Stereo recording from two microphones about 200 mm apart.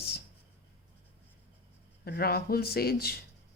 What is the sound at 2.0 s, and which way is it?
Speech, 50° left (ahead or behind).